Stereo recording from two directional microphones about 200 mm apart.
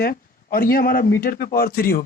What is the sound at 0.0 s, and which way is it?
A man's voice, 50° left (ahead or behind).